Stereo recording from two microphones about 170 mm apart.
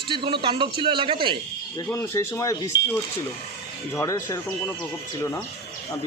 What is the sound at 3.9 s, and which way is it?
Speech, 15° left (ahead or behind).